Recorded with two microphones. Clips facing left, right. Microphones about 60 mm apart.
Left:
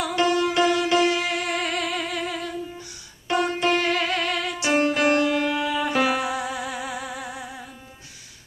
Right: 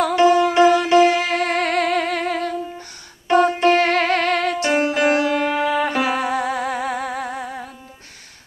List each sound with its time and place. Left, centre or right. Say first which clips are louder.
0.3 s music: right 6 dB; right
3.3 s music: right 7 dB; right
4.7 s music: right 1 dB; right
5.2 s music: right 3 dB; right